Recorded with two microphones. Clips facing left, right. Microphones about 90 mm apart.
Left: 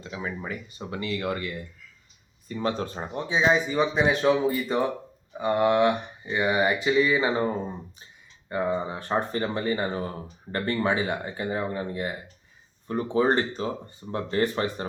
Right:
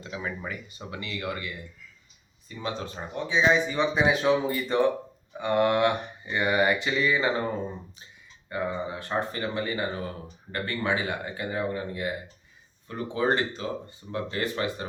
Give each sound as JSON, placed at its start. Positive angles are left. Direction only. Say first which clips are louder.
{"t": 0.0, "sound": "speech", "louder": "left 1 dB", "side_deg": 25}
{"t": 2.5, "sound": "speech", "louder": "left 5 dB", "side_deg": 45}
{"t": 3.5, "sound": "speech", "louder": "left 1 dB", "side_deg": 5}
{"t": 6.5, "sound": "speech", "louder": "left 1 dB", "side_deg": 15}
{"t": 8.4, "sound": "speech", "louder": "left 3 dB", "side_deg": 30}